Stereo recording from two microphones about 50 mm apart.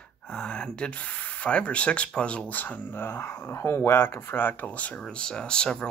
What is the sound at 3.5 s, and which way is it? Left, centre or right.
Speech, left.